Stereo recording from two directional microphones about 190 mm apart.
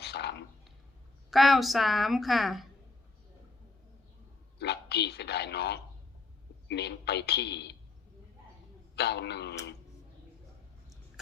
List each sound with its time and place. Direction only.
0.0 s a sound: 60° left (ahead or behind)
1.3 s a woman's voice: centre (ahead or behind)
4.6 s a woman's voice: 60° left (ahead or behind)
9.0 s a woman's voice: 60° left (ahead or behind)